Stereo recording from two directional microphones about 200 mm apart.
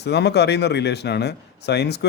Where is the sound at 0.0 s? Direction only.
55° left (ahead or behind).